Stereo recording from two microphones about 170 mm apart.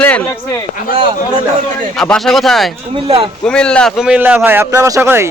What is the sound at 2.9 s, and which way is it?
Speech, 35° right (ahead or behind).